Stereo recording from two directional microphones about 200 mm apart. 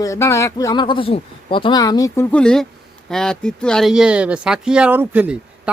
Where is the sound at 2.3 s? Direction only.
5° left (ahead or behind).